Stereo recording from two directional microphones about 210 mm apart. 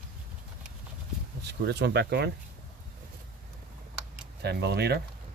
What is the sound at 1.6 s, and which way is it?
Speech, 55° right (ahead or behind).